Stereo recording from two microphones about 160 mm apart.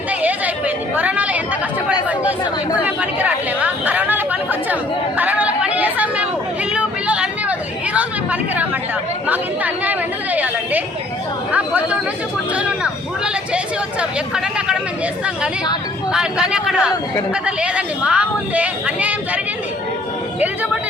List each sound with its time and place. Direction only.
0.1 s chatter: 10° right (ahead or behind)
2.8 s chatter: 10° right (ahead or behind)
6.7 s a sound: 5° right (ahead or behind)
7.9 s chatter: 10° right (ahead or behind)
11.5 s speech: 10° right (ahead or behind)
12.5 s a sound: 5° right (ahead or behind)
14.0 s speech: 5° right (ahead or behind)
16.1 s a man's voice: 5° right (ahead or behind)